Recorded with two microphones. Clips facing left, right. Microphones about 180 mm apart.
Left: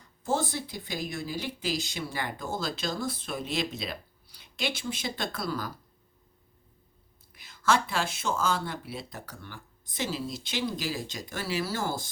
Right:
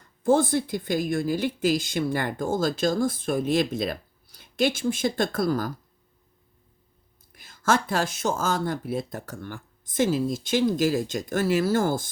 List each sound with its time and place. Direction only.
0.3 s a woman's voice: 50° right (ahead or behind)
7.3 s a woman's voice: 45° right (ahead or behind)